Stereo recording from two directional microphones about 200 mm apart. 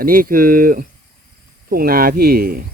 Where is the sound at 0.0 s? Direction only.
45° right (ahead or behind).